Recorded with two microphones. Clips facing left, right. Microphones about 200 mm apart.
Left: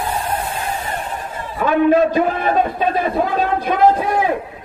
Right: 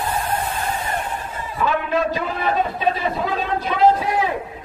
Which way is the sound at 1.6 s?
50° left (ahead or behind).